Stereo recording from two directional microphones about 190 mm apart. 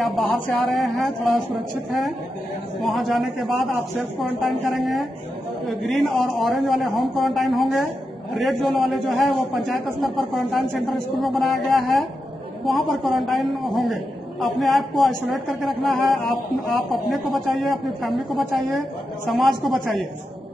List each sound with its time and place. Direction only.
0.0 s a man's voice: 5° left (ahead or behind)
2.9 s a man's voice: centre (ahead or behind)